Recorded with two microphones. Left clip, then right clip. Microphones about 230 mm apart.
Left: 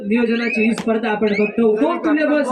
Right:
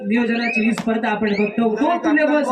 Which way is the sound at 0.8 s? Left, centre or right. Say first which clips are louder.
Left 2 dB; right.